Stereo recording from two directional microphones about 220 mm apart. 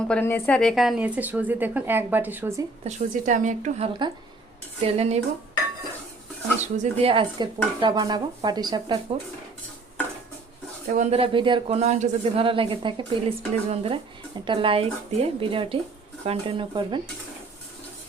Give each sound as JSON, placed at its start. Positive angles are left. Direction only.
{"t": 0.1, "sound": "a woman's voice", "side_deg": 10}
{"t": 2.8, "sound": "a woman's voice", "side_deg": -35}
{"t": 6.6, "sound": "speech", "side_deg": -25}
{"t": 10.9, "sound": "speech", "side_deg": -30}